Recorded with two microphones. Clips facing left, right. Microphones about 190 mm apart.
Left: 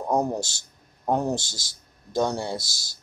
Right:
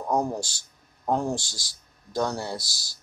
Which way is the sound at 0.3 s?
25° left (ahead or behind).